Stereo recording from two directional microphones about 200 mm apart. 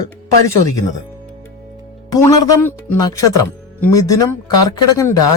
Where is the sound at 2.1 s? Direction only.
20° left (ahead or behind).